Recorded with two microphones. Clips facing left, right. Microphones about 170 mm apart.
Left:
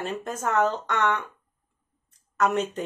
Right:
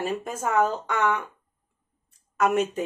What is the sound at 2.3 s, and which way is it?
Speech, 5° right (ahead or behind).